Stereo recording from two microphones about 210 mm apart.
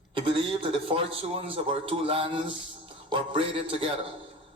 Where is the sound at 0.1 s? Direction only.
25° right (ahead or behind).